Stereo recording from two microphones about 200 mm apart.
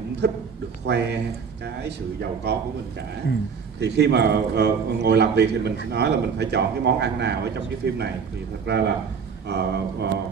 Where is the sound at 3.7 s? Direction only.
55° right (ahead or behind).